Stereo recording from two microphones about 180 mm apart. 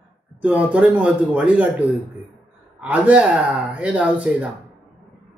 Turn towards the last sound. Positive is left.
turn(degrees=-5)  # may be behind; listen again after turning